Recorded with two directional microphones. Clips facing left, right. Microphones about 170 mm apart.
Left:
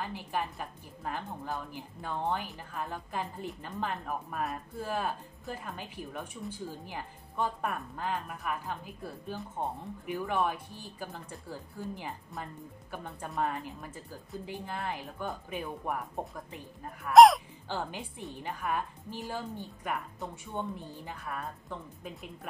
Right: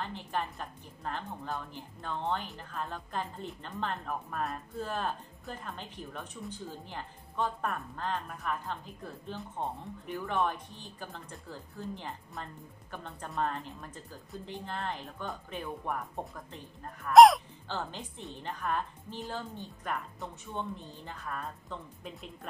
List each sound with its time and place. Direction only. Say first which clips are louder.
0.0 s speech: left 1 dB; 10° left (ahead or behind)
17.6 s speech: left 2 dB; 10° left (ahead or behind)